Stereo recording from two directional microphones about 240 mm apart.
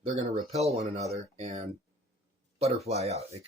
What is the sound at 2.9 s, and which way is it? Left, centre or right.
Speech, right.